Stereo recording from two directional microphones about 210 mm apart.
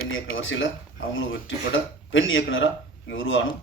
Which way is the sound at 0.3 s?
65° left (ahead or behind).